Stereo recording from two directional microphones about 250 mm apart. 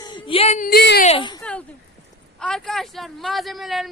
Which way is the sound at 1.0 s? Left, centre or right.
Centre.